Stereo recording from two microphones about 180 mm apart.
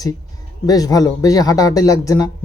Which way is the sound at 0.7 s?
20° left (ahead or behind).